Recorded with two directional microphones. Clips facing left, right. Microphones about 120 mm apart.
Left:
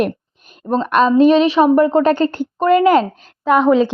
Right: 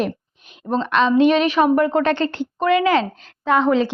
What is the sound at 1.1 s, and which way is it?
A woman's voice, 35° left (ahead or behind).